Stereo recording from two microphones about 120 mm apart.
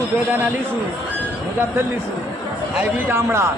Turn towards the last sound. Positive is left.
turn(degrees=-20)  # may be behind; listen again after turning